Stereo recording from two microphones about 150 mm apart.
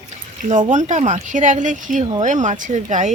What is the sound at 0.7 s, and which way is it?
Speech, 55° right (ahead or behind).